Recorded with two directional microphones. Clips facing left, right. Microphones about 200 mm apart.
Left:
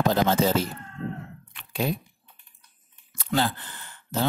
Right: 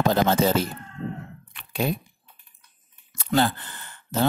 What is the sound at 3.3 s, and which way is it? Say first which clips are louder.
Speech: right 3 dB; 55° right (ahead or behind).